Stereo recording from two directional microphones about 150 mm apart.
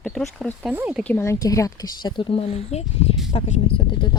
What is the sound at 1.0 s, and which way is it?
Speech, 15° left (ahead or behind).